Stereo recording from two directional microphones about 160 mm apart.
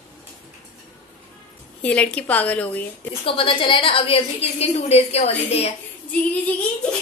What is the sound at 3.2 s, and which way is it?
A woman's voice, 35° left (ahead or behind).